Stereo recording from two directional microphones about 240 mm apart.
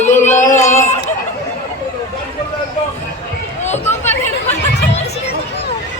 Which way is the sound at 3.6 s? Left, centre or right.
Left.